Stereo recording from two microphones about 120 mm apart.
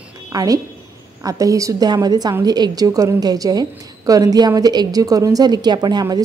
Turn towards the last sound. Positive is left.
turn(degrees=-35)  # may be behind; listen again after turning